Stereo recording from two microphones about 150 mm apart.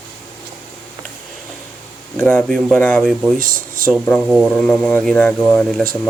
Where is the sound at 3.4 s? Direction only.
70° right (ahead or behind).